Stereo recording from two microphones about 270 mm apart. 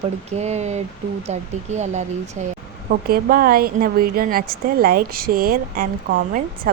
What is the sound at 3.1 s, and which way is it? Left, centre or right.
A woman's voice, right.